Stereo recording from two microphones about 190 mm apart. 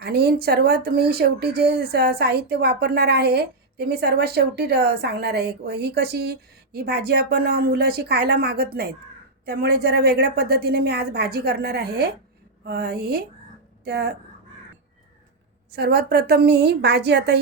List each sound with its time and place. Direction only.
0.0 s speech: 60° right (ahead or behind)
15.7 s speech: 55° right (ahead or behind)